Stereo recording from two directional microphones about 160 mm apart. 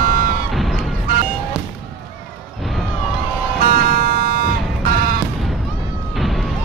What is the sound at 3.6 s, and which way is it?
Music, 60° right (ahead or behind).